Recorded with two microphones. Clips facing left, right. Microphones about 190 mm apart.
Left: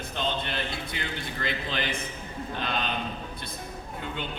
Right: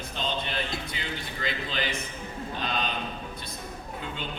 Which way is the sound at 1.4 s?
55° left (ahead or behind).